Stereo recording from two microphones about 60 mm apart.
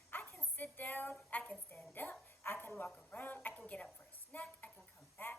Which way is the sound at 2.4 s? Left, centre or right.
Left.